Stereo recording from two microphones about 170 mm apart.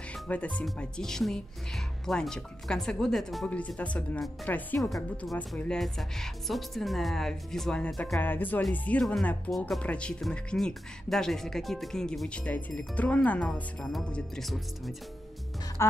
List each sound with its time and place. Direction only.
0.1 s speech: 10° left (ahead or behind)
15.8 s speech: 15° left (ahead or behind)